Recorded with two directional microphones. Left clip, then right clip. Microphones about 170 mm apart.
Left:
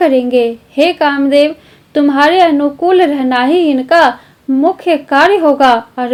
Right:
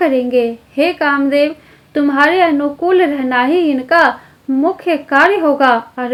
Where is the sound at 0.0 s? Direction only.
40° left (ahead or behind).